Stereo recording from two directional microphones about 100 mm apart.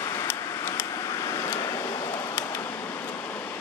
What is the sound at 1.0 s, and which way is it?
Vehicle, 35° left (ahead or behind).